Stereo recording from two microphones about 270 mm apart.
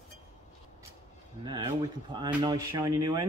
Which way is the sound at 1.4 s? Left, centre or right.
Centre.